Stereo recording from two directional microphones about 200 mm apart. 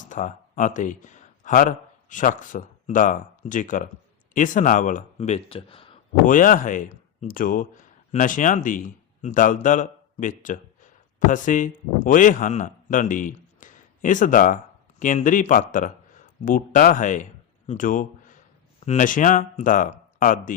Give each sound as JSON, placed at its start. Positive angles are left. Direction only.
{"t": 0.0, "sound": "a man's voice", "side_deg": 40}
{"t": 6.2, "sound": "speech", "side_deg": 40}